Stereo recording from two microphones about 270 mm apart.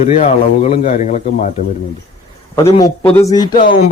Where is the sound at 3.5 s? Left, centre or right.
Left.